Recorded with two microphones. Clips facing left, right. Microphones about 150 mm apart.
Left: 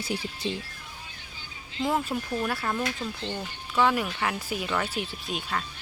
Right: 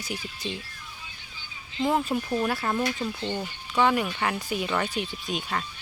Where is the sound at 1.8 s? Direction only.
Centre (ahead or behind).